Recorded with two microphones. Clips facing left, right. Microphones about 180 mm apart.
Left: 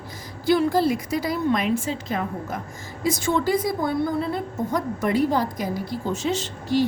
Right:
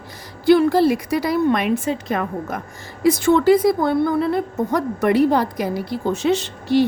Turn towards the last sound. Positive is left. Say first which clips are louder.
# right 4 dB
turn(degrees=-65)  # may be behind; listen again after turning